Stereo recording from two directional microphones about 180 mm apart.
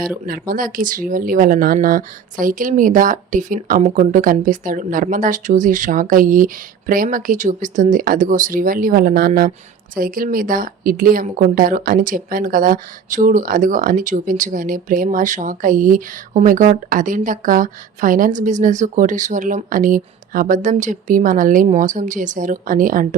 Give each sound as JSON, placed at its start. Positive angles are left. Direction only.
{"t": 0.3, "sound": "speech", "side_deg": -50}